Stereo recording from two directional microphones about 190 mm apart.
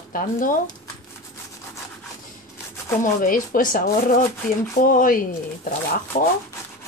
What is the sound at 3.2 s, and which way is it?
Speech, 45° left (ahead or behind).